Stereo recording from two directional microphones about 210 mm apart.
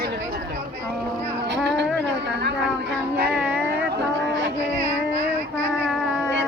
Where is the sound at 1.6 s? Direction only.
55° right (ahead or behind).